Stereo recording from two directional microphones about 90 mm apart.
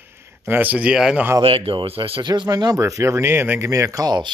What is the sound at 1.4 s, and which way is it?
Speech, 80° right.